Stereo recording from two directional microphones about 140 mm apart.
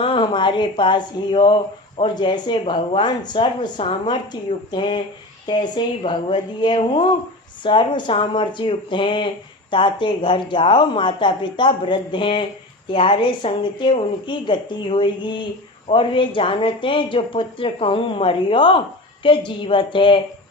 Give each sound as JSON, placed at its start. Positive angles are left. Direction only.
{"t": 0.0, "sound": "speech", "side_deg": 40}